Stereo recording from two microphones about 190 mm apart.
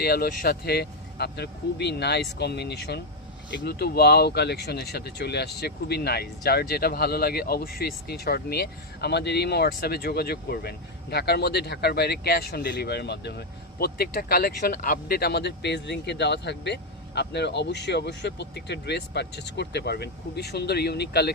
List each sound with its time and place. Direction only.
0.0 s speech: 55° left (ahead or behind)